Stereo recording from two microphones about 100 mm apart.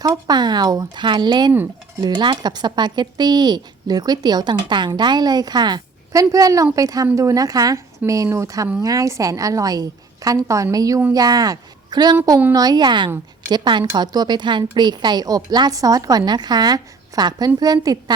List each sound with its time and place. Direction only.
0.0 s a woman's voice: 40° right (ahead or behind)